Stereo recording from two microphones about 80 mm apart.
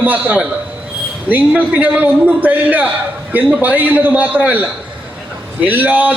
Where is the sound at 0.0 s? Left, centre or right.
Centre.